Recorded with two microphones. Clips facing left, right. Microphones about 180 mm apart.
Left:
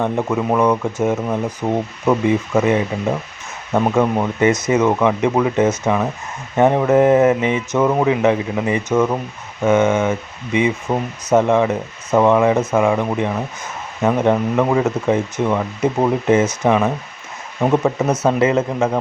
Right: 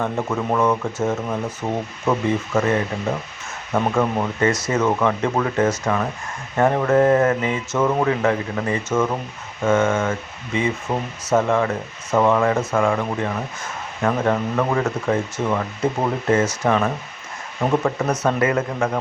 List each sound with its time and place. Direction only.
0.0 s speech: 15° left (ahead or behind)